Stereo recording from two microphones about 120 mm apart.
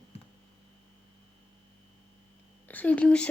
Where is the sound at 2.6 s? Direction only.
10° left (ahead or behind).